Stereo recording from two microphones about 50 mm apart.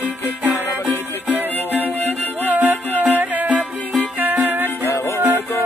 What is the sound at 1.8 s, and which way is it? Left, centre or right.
Music, left.